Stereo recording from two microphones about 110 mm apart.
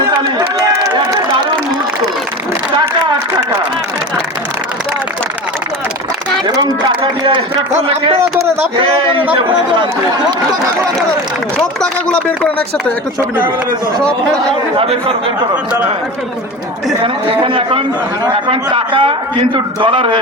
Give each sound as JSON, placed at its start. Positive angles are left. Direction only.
{"t": 7.0, "sound": "a sound", "side_deg": -50}
{"t": 7.8, "sound": "a man's voice", "side_deg": -60}
{"t": 8.2, "sound": "speech", "side_deg": -25}
{"t": 8.7, "sound": "a man's voice", "side_deg": -50}
{"t": 11.8, "sound": "speech", "side_deg": 10}
{"t": 14.8, "sound": "a man's voice", "side_deg": -55}
{"t": 17.0, "sound": "a man's voice", "side_deg": -55}